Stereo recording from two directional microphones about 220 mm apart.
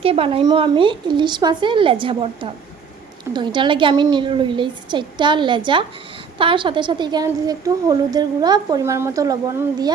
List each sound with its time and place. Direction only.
0.0 s a woman's voice: 25° right (ahead or behind)